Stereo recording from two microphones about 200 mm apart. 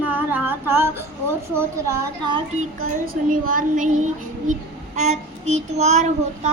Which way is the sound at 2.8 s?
45° right (ahead or behind).